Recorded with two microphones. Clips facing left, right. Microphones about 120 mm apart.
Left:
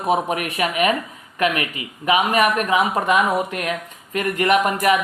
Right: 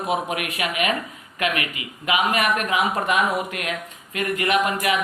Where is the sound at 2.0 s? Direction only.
40° left (ahead or behind).